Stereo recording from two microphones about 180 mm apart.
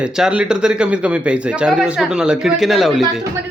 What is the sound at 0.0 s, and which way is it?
A man's voice, 5° right (ahead or behind).